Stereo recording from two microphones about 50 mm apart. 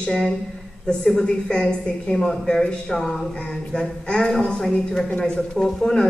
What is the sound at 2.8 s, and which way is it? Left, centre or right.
Speech, centre.